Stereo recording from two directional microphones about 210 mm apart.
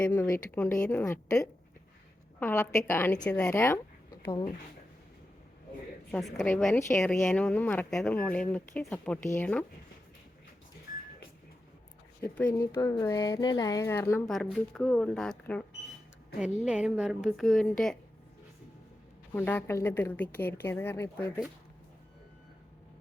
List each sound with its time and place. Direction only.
0.0 s a woman's voice: 10° left (ahead or behind)
6.1 s speech: centre (ahead or behind)
6.7 s a woman's voice: 15° left (ahead or behind)
10.9 s music: 40° left (ahead or behind)
12.2 s a woman's voice: 5° left (ahead or behind)
16.6 s speech: 5° right (ahead or behind)
19.3 s a woman's voice: 10° left (ahead or behind)